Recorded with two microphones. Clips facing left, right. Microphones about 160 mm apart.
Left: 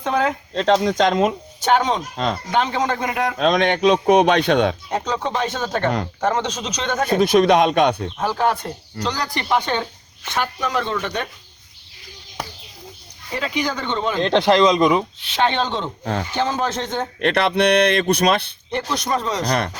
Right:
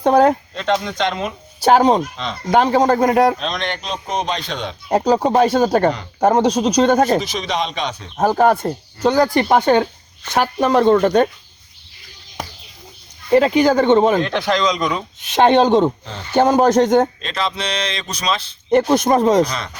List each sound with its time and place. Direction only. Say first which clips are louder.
0.0 s speech: right 8 dB; 40° right (ahead or behind)
0.5 s speech: left 3 dB; 35° left (ahead or behind)
1.5 s speech: right 9 dB; 35° right (ahead or behind)
3.3 s speech: left 7 dB; 55° left (ahead or behind)
4.9 s speech: right 8 dB; 35° right (ahead or behind)
7.2 s speech: left 8 dB; 55° left (ahead or behind)
8.1 s speech: right 6 dB; 45° right (ahead or behind)
13.3 s speech: right 12 dB; 50° right (ahead or behind)
14.2 s speech: left 3 dB; 30° left (ahead or behind)
15.3 s speech: right 9 dB; 45° right (ahead or behind)
17.2 s speech: left 6 dB; 65° left (ahead or behind)
18.7 s speech: right 9 dB; 45° right (ahead or behind)
19.5 s speech: left 6 dB; 60° left (ahead or behind)